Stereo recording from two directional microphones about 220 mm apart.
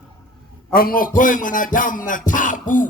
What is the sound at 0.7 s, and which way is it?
A man's voice, 40° left (ahead or behind).